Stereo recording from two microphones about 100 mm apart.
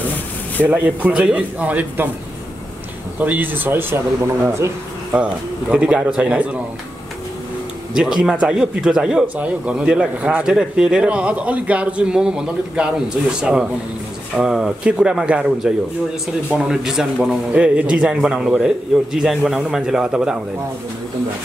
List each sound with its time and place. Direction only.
0.7 s speech: 15° right (ahead or behind)
3.2 s speech: 15° right (ahead or behind)
5.1 s speech: 10° right (ahead or behind)
7.9 s a man's voice: 5° right (ahead or behind)